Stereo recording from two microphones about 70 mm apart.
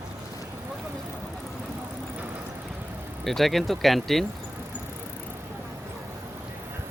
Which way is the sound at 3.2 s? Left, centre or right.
Centre.